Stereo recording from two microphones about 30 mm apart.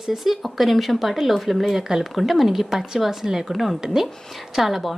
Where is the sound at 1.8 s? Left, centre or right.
Right.